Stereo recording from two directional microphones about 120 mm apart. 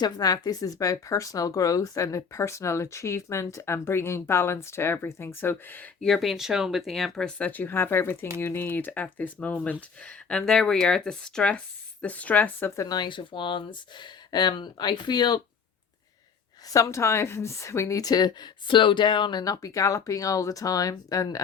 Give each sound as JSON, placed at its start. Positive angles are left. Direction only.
{"t": 0.0, "sound": "speech", "side_deg": 30}
{"t": 6.0, "sound": "speech", "side_deg": 0}
{"t": 16.6, "sound": "speech", "side_deg": 30}